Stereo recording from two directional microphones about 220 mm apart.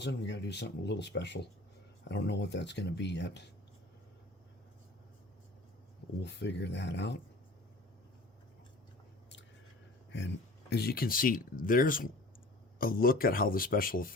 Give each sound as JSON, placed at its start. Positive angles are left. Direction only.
{"t": 0.0, "sound": "speech", "side_deg": 50}
{"t": 6.2, "sound": "speech", "side_deg": 50}
{"t": 10.1, "sound": "speech", "side_deg": 55}